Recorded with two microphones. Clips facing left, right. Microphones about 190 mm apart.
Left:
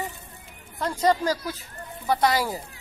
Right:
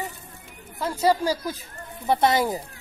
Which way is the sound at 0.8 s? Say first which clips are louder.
Right 1 dB; 5° right (ahead or behind).